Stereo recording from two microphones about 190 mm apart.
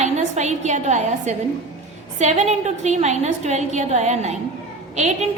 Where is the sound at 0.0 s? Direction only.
35° right (ahead or behind).